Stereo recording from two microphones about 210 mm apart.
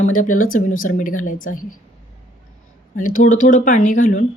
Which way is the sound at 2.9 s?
40° left (ahead or behind).